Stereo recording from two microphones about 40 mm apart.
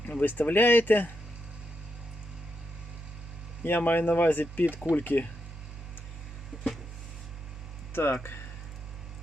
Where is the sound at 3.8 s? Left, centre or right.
Left.